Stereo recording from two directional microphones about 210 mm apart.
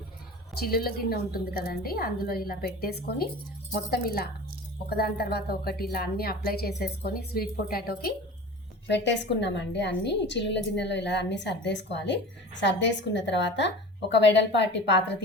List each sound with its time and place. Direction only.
0.5 s a woman's voice: 45° left (ahead or behind)
8.9 s a woman's voice: 55° left (ahead or behind)